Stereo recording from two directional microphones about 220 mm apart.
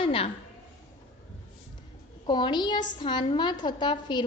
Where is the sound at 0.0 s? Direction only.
25° left (ahead or behind).